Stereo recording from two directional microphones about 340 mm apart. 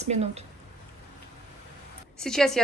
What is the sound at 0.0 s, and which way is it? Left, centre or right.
Speech, centre.